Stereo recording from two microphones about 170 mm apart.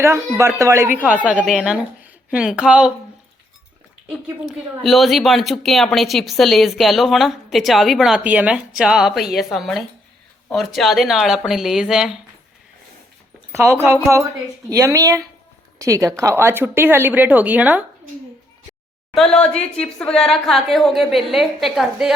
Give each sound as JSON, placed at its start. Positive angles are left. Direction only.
{"t": 0.0, "sound": "a woman's voice", "side_deg": -15}
{"t": 4.8, "sound": "speech", "side_deg": 0}
{"t": 13.5, "sound": "a woman's voice", "side_deg": -15}
{"t": 19.1, "sound": "speech", "side_deg": 5}